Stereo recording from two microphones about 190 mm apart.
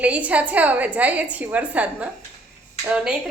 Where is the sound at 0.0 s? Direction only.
5° right (ahead or behind).